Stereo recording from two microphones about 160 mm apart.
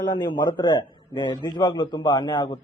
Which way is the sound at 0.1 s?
30° left (ahead or behind).